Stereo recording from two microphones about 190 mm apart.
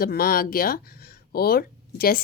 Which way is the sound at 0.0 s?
50° left (ahead or behind).